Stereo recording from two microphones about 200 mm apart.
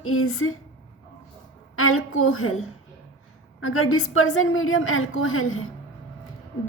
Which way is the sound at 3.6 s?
90° left.